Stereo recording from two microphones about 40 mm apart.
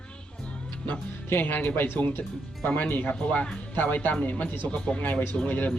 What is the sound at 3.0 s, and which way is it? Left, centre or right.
Speech, left.